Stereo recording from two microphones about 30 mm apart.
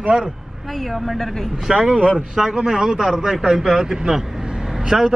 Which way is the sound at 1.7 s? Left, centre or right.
Right.